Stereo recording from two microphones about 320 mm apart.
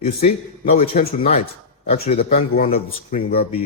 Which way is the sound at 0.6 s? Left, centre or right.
Left.